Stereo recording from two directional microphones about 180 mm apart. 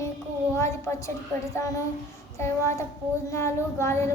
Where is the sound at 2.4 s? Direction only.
15° left (ahead or behind).